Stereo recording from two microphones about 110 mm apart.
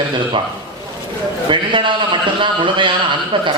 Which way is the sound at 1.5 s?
45° right (ahead or behind).